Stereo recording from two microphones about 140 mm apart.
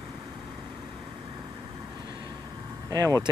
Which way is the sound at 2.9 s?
25° right (ahead or behind).